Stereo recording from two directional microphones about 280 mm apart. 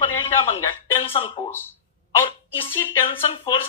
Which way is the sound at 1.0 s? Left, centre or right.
Centre.